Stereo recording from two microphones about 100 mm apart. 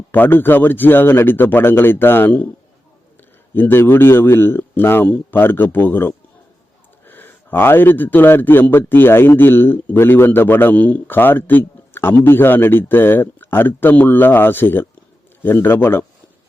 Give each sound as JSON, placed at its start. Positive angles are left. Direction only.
{"t": 0.1, "sound": "a man's voice", "side_deg": 20}
{"t": 3.5, "sound": "a man's voice", "side_deg": 20}